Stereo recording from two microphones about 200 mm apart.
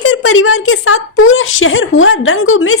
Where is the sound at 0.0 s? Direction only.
90° left.